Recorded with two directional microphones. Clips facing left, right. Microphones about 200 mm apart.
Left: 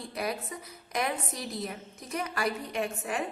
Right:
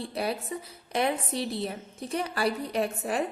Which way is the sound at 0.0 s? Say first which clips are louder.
Right 3 dB; 30° right (ahead or behind).